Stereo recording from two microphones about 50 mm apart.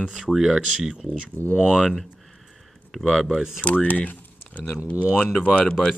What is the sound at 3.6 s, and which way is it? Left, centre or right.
Speech, left.